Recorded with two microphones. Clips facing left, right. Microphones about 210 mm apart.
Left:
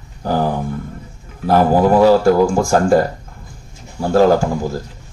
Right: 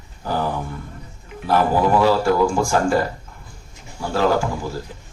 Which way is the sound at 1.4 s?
45° left (ahead or behind).